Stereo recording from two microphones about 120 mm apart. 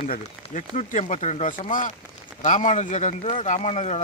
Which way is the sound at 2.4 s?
80° left.